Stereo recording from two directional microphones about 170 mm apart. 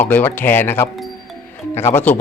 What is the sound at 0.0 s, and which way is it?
Speech, 10° left (ahead or behind).